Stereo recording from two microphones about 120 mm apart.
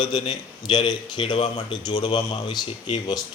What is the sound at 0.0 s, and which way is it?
Speech, 40° left (ahead or behind).